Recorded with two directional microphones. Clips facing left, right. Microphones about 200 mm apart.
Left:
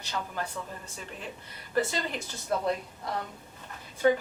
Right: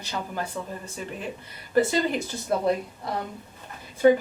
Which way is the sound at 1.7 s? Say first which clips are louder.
Right 7 dB; 10° right (ahead or behind).